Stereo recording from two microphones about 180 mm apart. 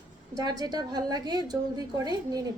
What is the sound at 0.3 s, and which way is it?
A woman's voice, 20° right (ahead or behind).